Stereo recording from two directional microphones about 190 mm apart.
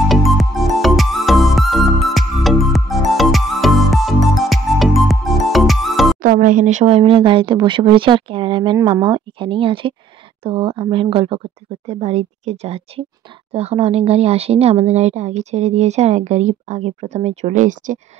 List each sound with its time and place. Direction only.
0.1 s music: centre (ahead or behind)
6.2 s speech: 45° right (ahead or behind)